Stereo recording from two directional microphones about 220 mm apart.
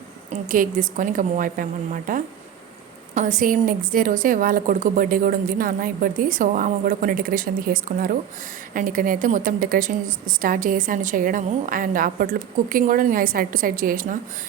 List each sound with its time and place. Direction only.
0.3 s a woman's voice: 40° right (ahead or behind)